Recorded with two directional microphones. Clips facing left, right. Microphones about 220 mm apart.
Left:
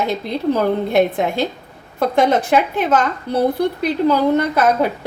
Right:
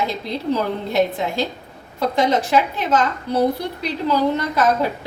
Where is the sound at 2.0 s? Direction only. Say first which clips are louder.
Left 3 dB; 55° left (ahead or behind).